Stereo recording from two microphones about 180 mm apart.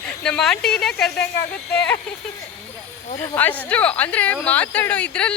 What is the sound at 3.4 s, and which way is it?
Speech, 10° left (ahead or behind).